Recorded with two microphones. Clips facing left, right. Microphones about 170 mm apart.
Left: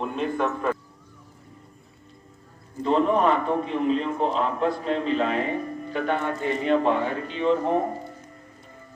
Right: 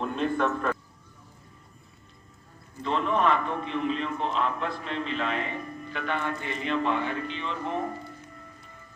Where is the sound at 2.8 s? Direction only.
35° left (ahead or behind).